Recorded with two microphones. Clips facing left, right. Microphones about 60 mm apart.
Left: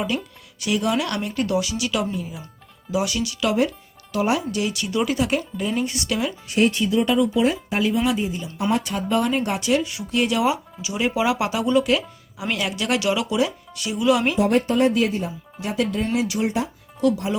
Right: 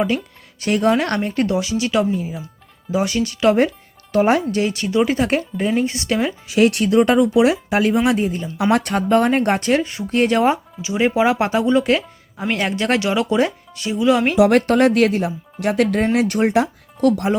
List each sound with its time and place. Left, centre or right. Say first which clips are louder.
0.6 s a woman's voice: right 5 dB; right
6.6 s speech: right 5 dB; right
7.9 s a woman's voice: right 5 dB; right
10.8 s speech: right 5 dB; right
14.3 s speech: right 5 dB; right